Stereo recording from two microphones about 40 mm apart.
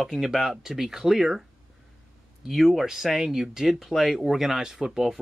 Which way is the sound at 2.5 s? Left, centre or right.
Centre.